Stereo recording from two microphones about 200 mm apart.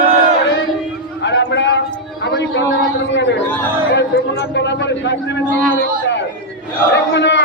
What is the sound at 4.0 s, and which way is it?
A man's voice, 60° left (ahead or behind).